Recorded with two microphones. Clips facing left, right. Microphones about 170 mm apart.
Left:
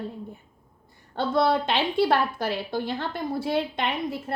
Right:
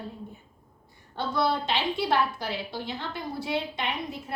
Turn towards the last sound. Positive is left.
turn(degrees=55)  # may be behind; listen again after turning